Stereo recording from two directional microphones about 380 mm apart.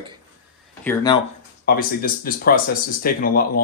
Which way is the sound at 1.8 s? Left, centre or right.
Left.